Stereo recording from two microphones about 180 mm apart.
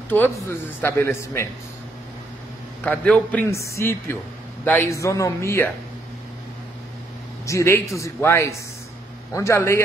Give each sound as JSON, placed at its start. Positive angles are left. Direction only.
{"t": 0.1, "sound": "speech", "side_deg": 10}
{"t": 2.8, "sound": "speech", "side_deg": 10}
{"t": 7.4, "sound": "speech", "side_deg": 15}